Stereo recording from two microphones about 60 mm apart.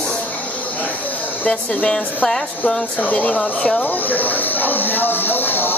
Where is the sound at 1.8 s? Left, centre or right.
Centre.